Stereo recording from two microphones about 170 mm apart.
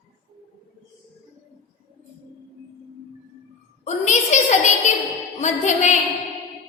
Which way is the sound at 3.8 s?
40° left (ahead or behind).